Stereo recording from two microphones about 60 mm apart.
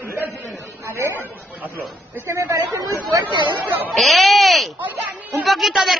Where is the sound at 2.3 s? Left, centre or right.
Right.